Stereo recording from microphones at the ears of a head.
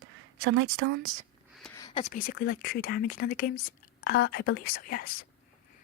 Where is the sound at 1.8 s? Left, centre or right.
Left.